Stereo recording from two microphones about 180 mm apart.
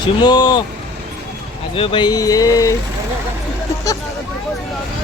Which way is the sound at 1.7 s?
30° left (ahead or behind).